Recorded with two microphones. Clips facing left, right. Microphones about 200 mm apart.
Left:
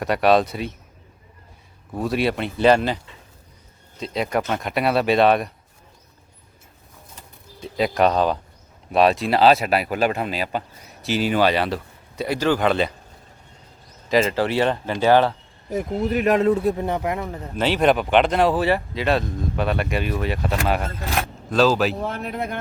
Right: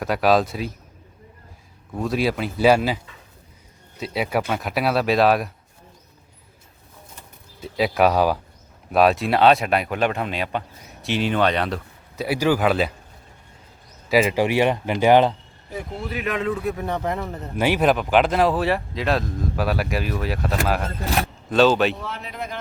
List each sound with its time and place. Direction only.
0.0 s speech: centre (ahead or behind)
2.0 s speech: centre (ahead or behind)
7.6 s speech: centre (ahead or behind)
14.1 s speech: 10° right (ahead or behind)
15.7 s speech: 45° left (ahead or behind); by 17.0 s 25° left (ahead or behind)
17.0 s a man's voice: 5° left (ahead or behind)
17.5 s speech: 10° right (ahead or behind)
22.0 s speech: 55° left (ahead or behind)